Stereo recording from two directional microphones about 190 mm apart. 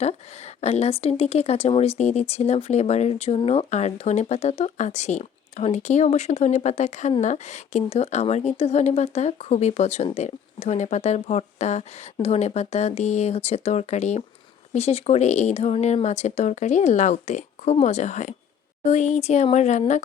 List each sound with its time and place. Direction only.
0.0 s speech: 35° left (ahead or behind)